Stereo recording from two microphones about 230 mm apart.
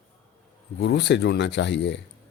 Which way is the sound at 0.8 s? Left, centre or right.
Left.